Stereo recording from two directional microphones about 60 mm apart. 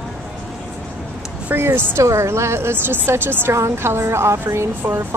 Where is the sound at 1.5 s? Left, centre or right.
Right.